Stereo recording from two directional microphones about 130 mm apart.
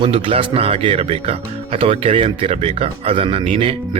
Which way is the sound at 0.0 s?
45° right (ahead or behind).